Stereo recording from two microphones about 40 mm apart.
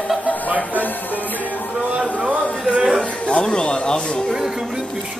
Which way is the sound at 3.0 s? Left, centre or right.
Left.